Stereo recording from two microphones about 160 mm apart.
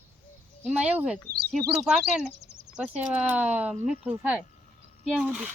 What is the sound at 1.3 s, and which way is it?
Speech, 80° right.